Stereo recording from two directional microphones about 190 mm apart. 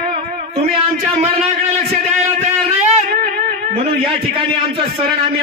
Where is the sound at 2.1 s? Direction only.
35° right (ahead or behind).